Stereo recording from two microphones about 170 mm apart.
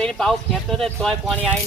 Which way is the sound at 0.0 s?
5° left (ahead or behind).